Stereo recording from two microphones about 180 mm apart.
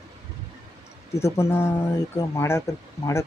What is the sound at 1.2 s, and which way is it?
Speech, 15° left (ahead or behind).